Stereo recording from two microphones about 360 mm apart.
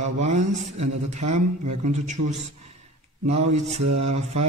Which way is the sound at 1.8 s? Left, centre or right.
Centre.